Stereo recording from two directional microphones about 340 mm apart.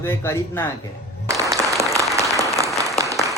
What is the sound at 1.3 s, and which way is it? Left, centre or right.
Applause, centre.